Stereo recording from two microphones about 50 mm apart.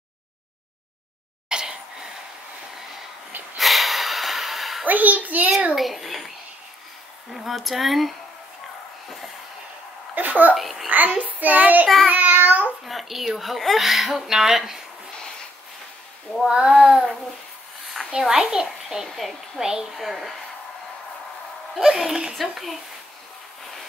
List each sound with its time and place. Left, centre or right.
1.5 s a sound: centre
3.5 s snort: centre
4.8 s child singing: right
5.8 s a child's voice: centre
7.3 s speech: centre
10.1 s child singing: right
10.5 s speech: centre
11.1 s child singing: right
12.8 s speech: centre
16.6 s a child's voice: centre
18.2 s a child's voice: centre
19.6 s a child's voice: centre
21.7 s speech: centre